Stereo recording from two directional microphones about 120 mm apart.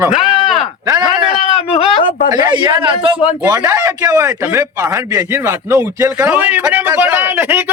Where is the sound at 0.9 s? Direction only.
35° right (ahead or behind).